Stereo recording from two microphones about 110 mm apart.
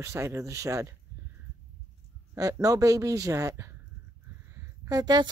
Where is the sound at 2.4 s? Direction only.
30° right (ahead or behind).